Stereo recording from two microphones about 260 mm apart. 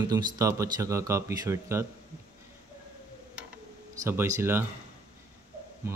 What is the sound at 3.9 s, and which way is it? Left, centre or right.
Speech, centre.